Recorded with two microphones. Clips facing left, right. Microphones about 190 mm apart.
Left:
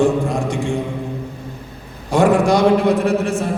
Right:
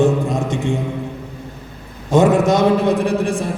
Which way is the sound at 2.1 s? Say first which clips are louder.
Right 1 dB; 20° right (ahead or behind).